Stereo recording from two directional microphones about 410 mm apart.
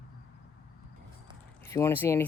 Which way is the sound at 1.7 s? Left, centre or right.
Centre.